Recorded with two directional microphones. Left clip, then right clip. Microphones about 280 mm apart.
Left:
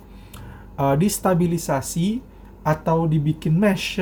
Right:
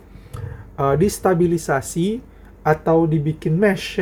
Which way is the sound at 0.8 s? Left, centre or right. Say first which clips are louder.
Right 3 dB; centre.